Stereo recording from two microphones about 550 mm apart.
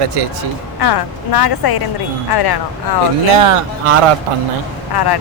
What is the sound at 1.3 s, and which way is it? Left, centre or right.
A woman's voice, left.